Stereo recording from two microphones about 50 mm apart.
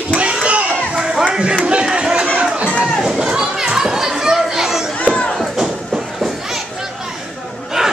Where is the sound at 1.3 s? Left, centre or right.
Right.